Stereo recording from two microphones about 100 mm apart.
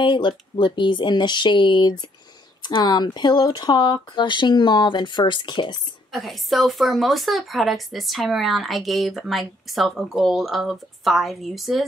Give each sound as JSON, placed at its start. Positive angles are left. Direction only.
{"t": 0.0, "sound": "speech", "side_deg": 50}
{"t": 6.1, "sound": "speech", "side_deg": 0}